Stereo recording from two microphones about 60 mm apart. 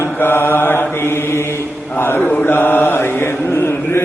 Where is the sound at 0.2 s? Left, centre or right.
Left.